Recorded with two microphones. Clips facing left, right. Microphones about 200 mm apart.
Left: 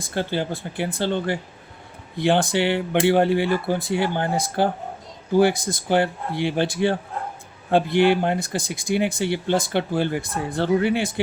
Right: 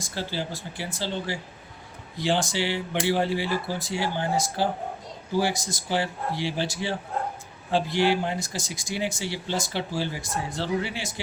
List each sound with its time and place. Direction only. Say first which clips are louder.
0.0 s speech: left 6 dB; 55° left (ahead or behind)